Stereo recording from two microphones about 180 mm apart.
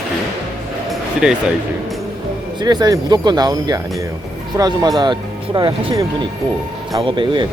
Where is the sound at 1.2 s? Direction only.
5° right (ahead or behind).